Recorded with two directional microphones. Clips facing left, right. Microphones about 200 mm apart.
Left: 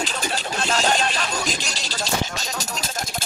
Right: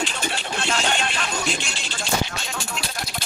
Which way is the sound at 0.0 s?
40° left (ahead or behind).